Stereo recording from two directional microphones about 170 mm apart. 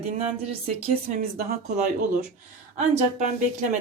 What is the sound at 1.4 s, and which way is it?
Speech, 60° right (ahead or behind).